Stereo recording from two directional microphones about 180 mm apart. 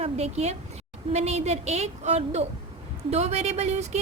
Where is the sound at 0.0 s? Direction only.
35° right (ahead or behind).